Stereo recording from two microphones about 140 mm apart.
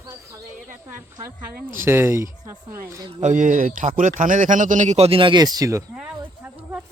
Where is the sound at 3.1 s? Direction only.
60° right (ahead or behind); by 5.8 s 25° right (ahead or behind).